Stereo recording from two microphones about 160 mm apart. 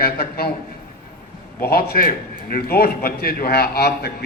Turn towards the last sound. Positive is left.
turn(degrees=85)